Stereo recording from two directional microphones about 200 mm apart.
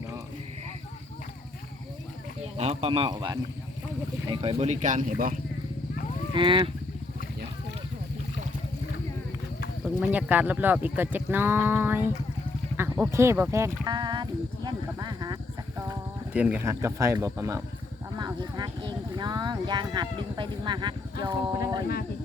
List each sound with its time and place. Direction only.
2.6 s a man's voice: 30° right (ahead or behind)
6.3 s a man's voice: 25° right (ahead or behind)
10.0 s speech: 10° right (ahead or behind)